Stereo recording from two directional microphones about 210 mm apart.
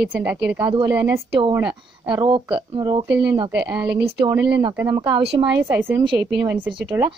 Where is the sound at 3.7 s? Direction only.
5° right (ahead or behind).